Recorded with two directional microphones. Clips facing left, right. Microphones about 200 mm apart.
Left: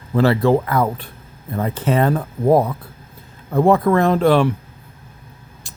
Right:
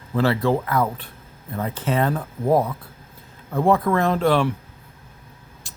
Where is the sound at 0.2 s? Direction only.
50° left (ahead or behind).